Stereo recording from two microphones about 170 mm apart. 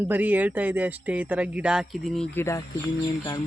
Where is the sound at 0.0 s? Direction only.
10° right (ahead or behind).